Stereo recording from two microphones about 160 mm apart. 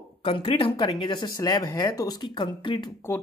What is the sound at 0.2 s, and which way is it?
Speech, 35° left (ahead or behind).